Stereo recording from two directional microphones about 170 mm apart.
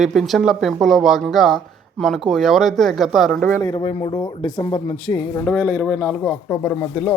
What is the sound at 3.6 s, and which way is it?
Speech, 20° left (ahead or behind).